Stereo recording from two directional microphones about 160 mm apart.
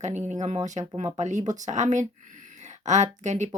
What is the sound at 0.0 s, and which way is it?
Speech, 50° right (ahead or behind).